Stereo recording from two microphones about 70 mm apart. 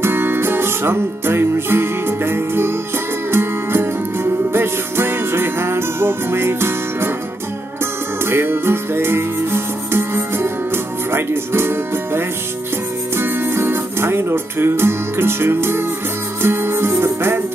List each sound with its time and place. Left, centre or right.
0.0 s music: right